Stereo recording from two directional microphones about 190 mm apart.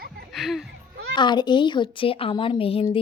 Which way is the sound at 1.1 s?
25° left (ahead or behind).